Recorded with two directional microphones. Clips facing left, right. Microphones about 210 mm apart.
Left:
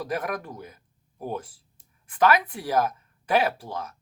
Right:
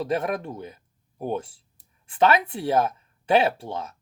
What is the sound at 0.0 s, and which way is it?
Speech, 25° right (ahead or behind).